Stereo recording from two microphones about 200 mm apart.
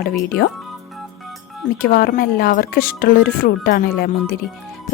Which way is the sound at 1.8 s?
50° left (ahead or behind).